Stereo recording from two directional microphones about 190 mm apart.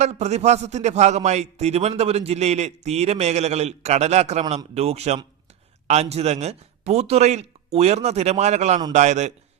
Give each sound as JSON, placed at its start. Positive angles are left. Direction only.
{"t": 0.0, "sound": "a man's voice", "side_deg": -35}